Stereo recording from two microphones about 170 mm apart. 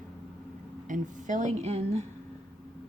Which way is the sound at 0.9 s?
50° right (ahead or behind).